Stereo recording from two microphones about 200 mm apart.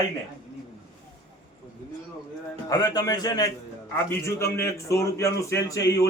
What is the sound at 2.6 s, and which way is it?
A man's voice, 20° left (ahead or behind).